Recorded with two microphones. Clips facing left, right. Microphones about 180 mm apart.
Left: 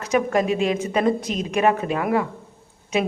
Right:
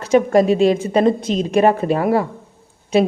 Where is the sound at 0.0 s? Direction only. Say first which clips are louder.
Right 7 dB; 30° right (ahead or behind).